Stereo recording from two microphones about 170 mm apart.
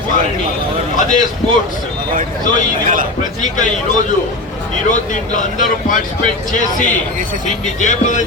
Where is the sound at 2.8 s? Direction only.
50° right (ahead or behind).